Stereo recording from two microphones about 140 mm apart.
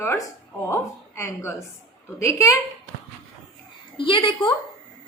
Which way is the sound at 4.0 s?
35° left (ahead or behind).